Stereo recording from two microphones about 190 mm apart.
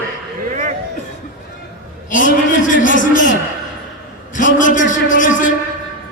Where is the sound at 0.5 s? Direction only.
40° right (ahead or behind).